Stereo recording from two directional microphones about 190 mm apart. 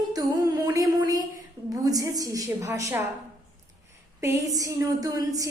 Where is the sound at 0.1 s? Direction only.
20° right (ahead or behind).